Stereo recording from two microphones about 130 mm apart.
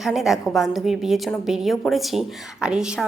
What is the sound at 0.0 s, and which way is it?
Speech, centre (ahead or behind).